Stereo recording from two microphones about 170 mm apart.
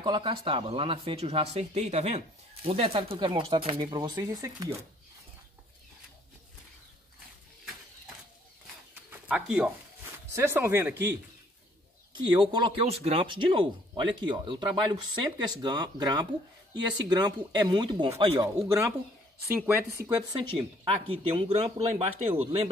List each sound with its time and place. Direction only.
0.0 s speech: 30° right (ahead or behind)
9.3 s speech: 5° right (ahead or behind)
12.1 s speech: 25° right (ahead or behind)
20.3 s speech: 30° right (ahead or behind)